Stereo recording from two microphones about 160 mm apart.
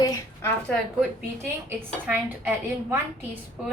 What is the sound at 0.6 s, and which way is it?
Speech, 5° left (ahead or behind).